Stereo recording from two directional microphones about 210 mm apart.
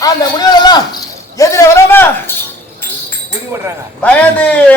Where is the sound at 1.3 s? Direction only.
15° left (ahead or behind).